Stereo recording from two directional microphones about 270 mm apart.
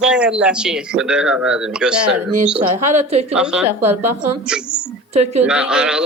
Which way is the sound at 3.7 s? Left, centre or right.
Right.